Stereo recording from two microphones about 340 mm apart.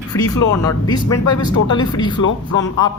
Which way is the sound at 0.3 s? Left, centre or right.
Centre.